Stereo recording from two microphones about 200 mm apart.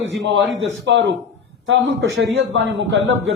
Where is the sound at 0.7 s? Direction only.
70° right (ahead or behind).